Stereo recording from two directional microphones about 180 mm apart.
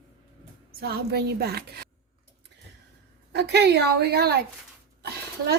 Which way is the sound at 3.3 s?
70° right (ahead or behind).